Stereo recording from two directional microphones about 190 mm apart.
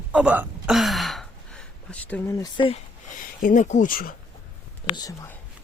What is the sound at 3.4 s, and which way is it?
Speech, 40° left (ahead or behind).